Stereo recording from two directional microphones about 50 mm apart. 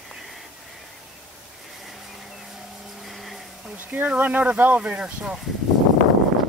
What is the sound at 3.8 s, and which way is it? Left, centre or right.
Speech, right.